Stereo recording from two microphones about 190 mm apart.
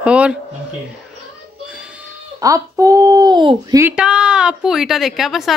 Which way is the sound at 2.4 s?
15° right (ahead or behind).